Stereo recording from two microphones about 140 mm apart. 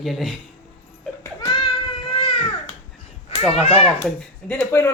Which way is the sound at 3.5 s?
45° left (ahead or behind).